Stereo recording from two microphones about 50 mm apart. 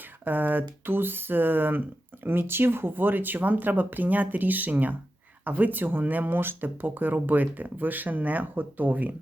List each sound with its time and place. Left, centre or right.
0.0 s speech: right